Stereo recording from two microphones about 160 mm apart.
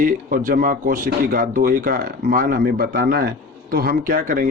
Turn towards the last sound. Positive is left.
turn(degrees=-60)  # may be behind; listen again after turning